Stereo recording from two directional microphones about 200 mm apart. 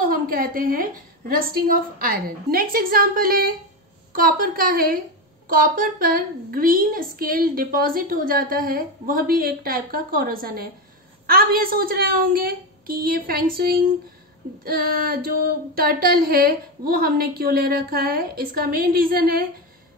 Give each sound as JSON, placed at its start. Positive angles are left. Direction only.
{"t": 0.0, "sound": "a woman's voice", "side_deg": -45}